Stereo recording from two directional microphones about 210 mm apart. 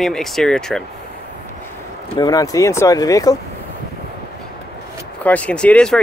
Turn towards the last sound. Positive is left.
turn(degrees=5)  # may be behind; listen again after turning